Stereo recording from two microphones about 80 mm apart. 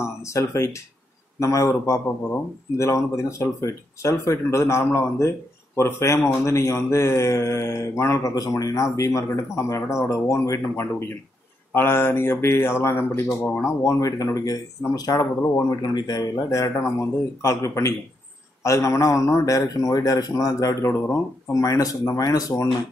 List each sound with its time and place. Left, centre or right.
0.0 s speech: left
8.4 s speech: left
13.8 s a man's voice: left
15.8 s speech: left
16.4 s a man's voice: left